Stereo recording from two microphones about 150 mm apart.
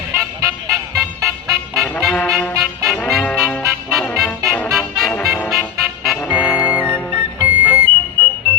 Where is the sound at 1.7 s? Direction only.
Centre (ahead or behind).